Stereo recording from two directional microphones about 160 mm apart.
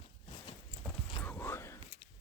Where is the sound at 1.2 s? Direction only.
10° left (ahead or behind).